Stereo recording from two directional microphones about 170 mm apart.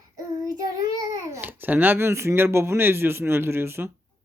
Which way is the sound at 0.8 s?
20° right (ahead or behind).